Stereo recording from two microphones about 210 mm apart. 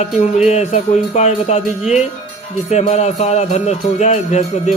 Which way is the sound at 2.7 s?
30° left (ahead or behind).